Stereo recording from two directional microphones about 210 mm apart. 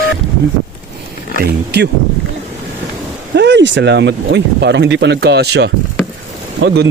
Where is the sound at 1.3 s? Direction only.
55° right (ahead or behind).